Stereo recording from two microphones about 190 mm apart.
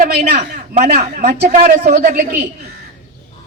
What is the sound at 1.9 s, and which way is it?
Speech, 40° right (ahead or behind).